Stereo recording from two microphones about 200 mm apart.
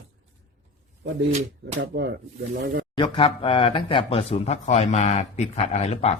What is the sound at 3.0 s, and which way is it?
Speech, 25° left (ahead or behind).